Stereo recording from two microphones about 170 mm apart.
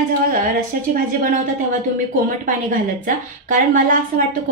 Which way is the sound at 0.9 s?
55° right (ahead or behind).